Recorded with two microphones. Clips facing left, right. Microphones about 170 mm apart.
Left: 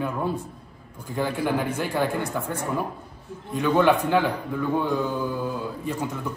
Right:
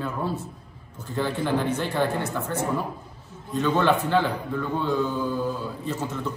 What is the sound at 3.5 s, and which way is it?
A man's voice, 10° left (ahead or behind).